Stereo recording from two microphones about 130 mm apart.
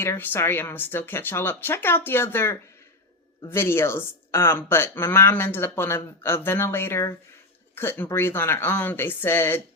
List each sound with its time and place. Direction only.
0.0 s speech: 15° left (ahead or behind)